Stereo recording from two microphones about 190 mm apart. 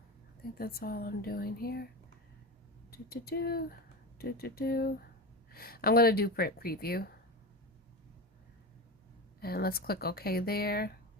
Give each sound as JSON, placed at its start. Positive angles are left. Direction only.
{"t": 0.5, "sound": "speech", "side_deg": 55}
{"t": 2.9, "sound": "speech", "side_deg": 55}
{"t": 9.4, "sound": "speech", "side_deg": 55}